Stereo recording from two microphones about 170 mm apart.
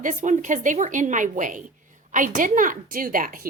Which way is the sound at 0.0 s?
50° right (ahead or behind).